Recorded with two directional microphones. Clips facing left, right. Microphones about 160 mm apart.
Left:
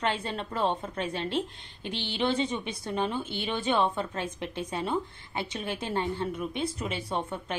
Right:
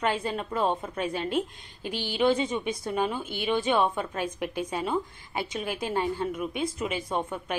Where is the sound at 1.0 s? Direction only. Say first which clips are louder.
Right 2 dB; 30° left (ahead or behind).